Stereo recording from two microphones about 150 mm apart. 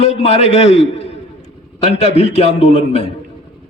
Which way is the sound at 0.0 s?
45° left (ahead or behind).